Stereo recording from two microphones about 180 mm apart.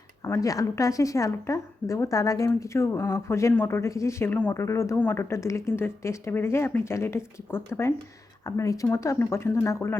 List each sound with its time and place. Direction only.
0.3 s speech: 20° left (ahead or behind)